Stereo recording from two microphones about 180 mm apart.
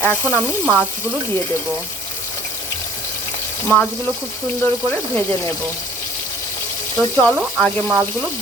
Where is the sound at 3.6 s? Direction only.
10° left (ahead or behind).